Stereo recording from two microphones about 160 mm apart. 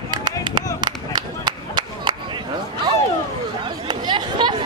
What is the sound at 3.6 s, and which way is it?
Chatter, 30° right (ahead or behind).